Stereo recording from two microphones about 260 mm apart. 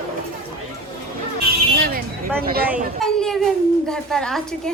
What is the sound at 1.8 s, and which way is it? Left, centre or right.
Vehicle, right.